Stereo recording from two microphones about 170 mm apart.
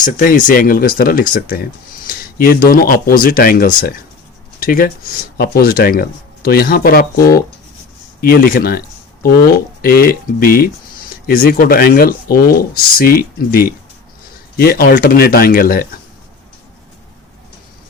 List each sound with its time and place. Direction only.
0.0 s speech: 55° left (ahead or behind)
2.0 s a sound: 60° left (ahead or behind)
2.6 s speech: 55° left (ahead or behind)
9.8 s speech: 60° left (ahead or behind)